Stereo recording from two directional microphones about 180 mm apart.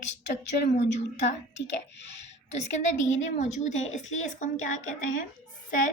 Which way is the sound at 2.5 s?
40° left (ahead or behind).